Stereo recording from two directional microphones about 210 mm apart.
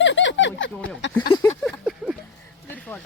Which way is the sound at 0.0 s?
60° left (ahead or behind).